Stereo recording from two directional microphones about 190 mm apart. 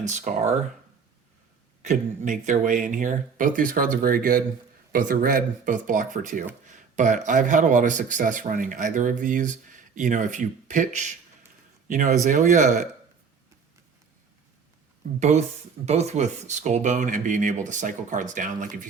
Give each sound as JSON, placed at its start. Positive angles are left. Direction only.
{"t": 0.0, "sound": "speech", "side_deg": -40}
{"t": 1.8, "sound": "speech", "side_deg": -40}
{"t": 15.2, "sound": "speech", "side_deg": -35}